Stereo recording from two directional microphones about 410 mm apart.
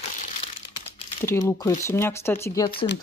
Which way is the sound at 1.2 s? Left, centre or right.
Centre.